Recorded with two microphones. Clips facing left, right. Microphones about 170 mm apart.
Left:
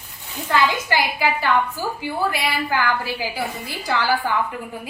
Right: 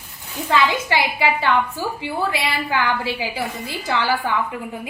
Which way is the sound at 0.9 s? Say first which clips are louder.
Right 2 dB; 25° right (ahead or behind).